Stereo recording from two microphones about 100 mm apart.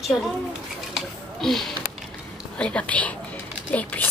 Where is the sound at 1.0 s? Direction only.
5° left (ahead or behind).